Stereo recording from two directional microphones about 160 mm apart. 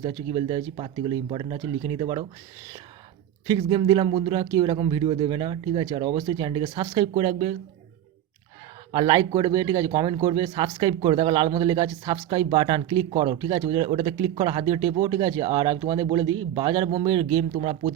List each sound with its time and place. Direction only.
0.0 s a man's voice: 35° right (ahead or behind)
3.6 s a man's voice: 30° right (ahead or behind)
8.9 s a man's voice: 30° right (ahead or behind)